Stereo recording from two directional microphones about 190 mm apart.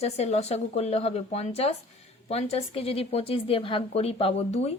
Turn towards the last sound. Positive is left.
turn(degrees=35)  # may be behind; listen again after turning